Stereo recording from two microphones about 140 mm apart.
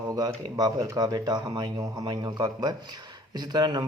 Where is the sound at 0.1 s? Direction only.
25° right (ahead or behind).